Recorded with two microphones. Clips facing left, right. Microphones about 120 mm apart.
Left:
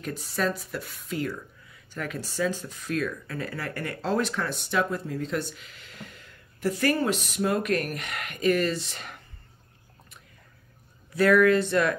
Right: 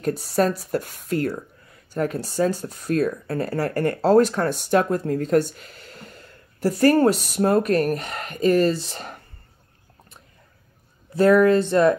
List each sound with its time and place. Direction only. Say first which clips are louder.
0.0 s speech: right 8 dB; 40° right (ahead or behind)
11.1 s speech: right 4 dB; 30° right (ahead or behind)